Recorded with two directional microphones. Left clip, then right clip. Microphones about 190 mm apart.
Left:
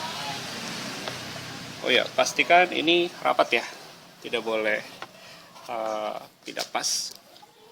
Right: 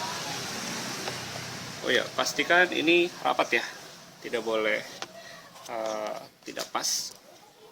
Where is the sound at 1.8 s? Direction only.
30° left (ahead or behind).